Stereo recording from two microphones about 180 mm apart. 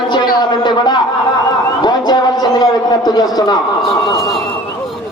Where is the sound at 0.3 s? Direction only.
25° left (ahead or behind).